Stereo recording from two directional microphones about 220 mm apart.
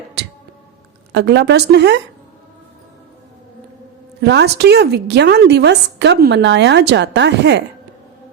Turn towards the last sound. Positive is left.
turn(degrees=-50)  # may be behind; listen again after turning